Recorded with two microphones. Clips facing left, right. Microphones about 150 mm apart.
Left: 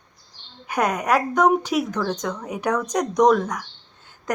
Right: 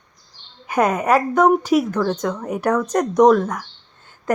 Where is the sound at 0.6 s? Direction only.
5° right (ahead or behind).